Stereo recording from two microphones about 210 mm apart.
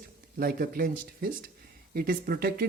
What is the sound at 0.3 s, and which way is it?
A man's voice, 45° right (ahead or behind).